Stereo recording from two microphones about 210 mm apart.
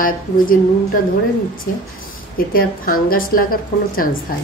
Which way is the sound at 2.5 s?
45° left (ahead or behind).